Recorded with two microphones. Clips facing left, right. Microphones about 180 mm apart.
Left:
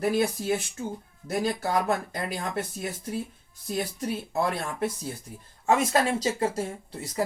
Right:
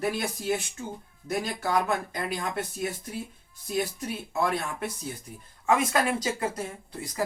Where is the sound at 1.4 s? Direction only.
35° left (ahead or behind).